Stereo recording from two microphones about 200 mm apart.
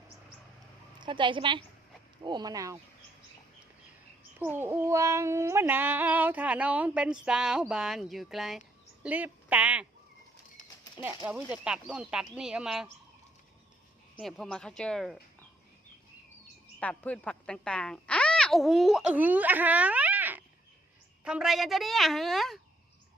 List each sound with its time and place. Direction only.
0.9 s a woman's voice: 25° right (ahead or behind)
4.4 s a sound: 10° right (ahead or behind)
9.0 s speech: 10° right (ahead or behind)
11.0 s a sound: 10° right (ahead or behind)
11.5 s a woman's voice: 5° right (ahead or behind)
14.2 s a woman's voice: centre (ahead or behind)
16.8 s a woman's voice: 5° left (ahead or behind)